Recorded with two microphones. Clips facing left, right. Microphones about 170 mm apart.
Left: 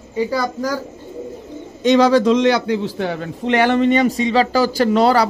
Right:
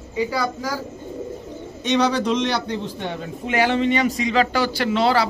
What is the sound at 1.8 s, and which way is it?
Speech, 90° left.